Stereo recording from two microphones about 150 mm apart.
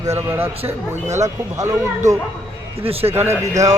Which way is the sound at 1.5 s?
20° right (ahead or behind).